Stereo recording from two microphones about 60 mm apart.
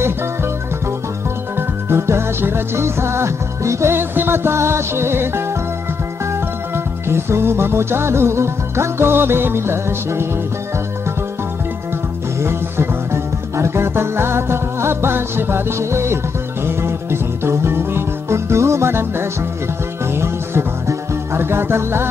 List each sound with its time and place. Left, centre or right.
1.6 s music: right
6.7 s music: right
12.4 s music: right